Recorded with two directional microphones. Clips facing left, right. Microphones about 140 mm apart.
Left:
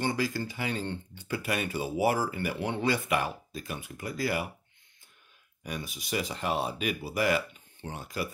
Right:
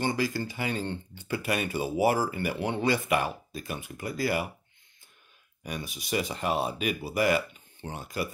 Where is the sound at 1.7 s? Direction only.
10° right (ahead or behind).